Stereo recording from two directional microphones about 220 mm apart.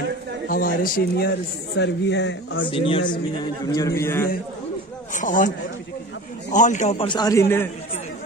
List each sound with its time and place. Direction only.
0.5 s a man's voice: 40° left (ahead or behind)
2.6 s a man's voice: 25° left (ahead or behind)
5.1 s speech: 35° left (ahead or behind)
6.5 s a man's voice: 35° left (ahead or behind); by 7.7 s 10° left (ahead or behind)